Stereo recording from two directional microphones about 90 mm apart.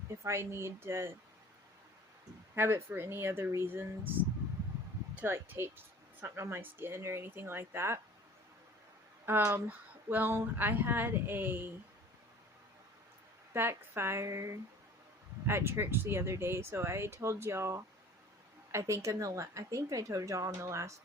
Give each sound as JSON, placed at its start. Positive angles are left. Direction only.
{"t": 0.2, "sound": "speech", "side_deg": -30}
{"t": 2.6, "sound": "speech", "side_deg": -30}
{"t": 5.2, "sound": "speech", "side_deg": -25}
{"t": 9.2, "sound": "speech", "side_deg": -25}
{"t": 13.5, "sound": "speech", "side_deg": -25}